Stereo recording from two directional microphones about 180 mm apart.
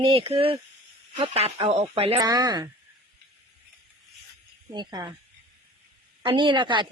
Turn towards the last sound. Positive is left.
turn(degrees=-25)  # may be behind; listen again after turning